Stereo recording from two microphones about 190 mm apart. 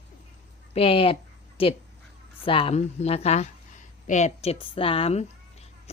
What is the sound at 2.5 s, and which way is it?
A woman's voice, 30° left (ahead or behind).